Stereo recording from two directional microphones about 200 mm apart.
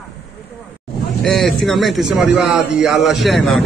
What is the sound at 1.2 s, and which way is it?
A man's voice, centre (ahead or behind).